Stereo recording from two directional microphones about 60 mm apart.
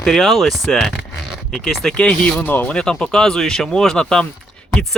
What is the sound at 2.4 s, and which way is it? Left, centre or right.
Speech, left.